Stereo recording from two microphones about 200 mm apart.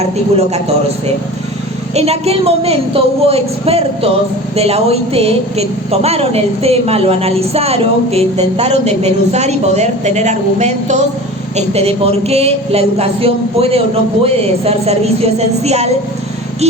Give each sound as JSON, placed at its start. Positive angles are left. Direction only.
{"t": 0.0, "sound": "a woman's voice", "side_deg": -35}
{"t": 2.0, "sound": "a woman's voice", "side_deg": -30}